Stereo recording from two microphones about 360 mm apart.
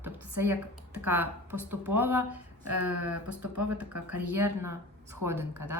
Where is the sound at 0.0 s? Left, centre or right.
Centre.